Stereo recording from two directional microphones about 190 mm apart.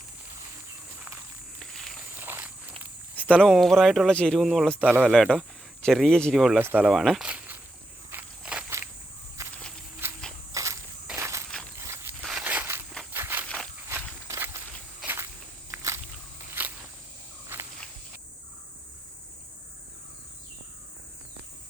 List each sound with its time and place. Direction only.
0.9 s walk: 10° right (ahead or behind)
1.7 s a sound: centre (ahead or behind)
2.1 s walk: 10° right (ahead or behind)
3.3 s speech: centre (ahead or behind)
5.1 s speech: centre (ahead or behind)
8.1 s walk: 10° right (ahead or behind)
10.0 s insect: 10° right (ahead or behind)
10.5 s walk: 15° right (ahead or behind)
11.8 s a sound: 15° right (ahead or behind)
12.2 s crushing: 5° right (ahead or behind)
13.1 s a sound: 10° right (ahead or behind)
13.8 s walk: 15° right (ahead or behind)
16.6 s a sound: 10° right (ahead or behind)